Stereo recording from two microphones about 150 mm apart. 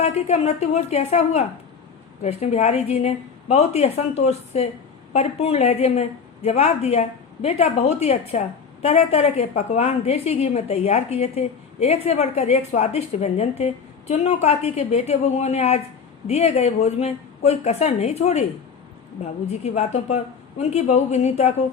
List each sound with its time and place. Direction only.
0.0 s a woman's voice: 45° left (ahead or behind)